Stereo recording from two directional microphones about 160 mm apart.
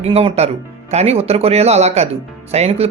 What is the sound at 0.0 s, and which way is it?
Speech, 40° right (ahead or behind).